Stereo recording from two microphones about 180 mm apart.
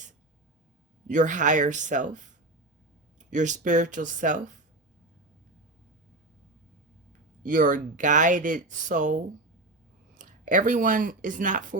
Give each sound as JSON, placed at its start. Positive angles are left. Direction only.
{"t": 1.0, "sound": "speech", "side_deg": -45}
{"t": 7.4, "sound": "speech", "side_deg": -45}